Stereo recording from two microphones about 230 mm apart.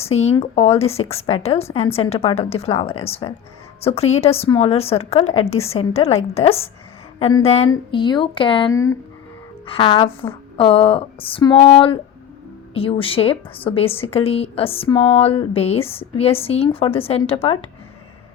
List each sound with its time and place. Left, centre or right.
0.0 s a woman's voice: left
5.2 s a woman's voice: left
5.5 s a woman's voice: left